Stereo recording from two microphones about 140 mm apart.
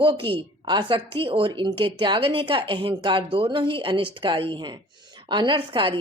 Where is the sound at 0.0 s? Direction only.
40° right (ahead or behind).